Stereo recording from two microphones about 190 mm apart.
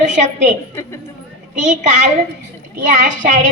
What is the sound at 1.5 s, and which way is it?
A woman's voice, 40° right (ahead or behind).